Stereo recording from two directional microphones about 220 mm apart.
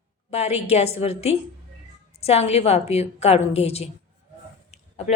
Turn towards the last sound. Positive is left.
turn(degrees=30)  # may be behind; listen again after turning